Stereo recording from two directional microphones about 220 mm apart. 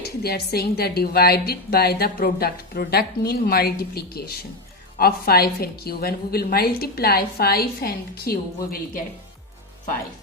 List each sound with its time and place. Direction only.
0.0 s a woman's voice: 45° left (ahead or behind)